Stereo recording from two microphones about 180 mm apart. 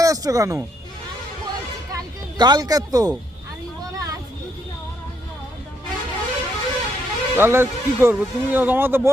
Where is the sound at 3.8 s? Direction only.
20° right (ahead or behind).